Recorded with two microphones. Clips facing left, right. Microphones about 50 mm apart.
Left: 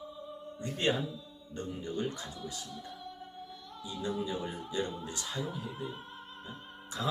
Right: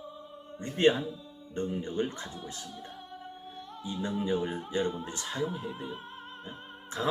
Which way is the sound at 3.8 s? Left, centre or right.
Right.